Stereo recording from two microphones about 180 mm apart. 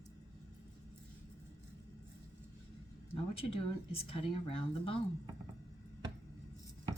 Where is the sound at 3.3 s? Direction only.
30° left (ahead or behind).